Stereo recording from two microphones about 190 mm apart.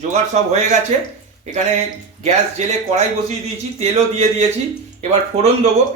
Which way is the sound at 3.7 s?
35° right (ahead or behind).